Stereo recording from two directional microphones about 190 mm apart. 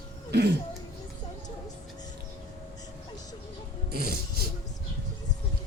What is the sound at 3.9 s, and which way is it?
Music, 55° right (ahead or behind).